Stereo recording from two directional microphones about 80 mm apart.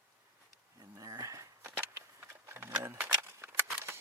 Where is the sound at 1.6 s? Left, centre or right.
Right.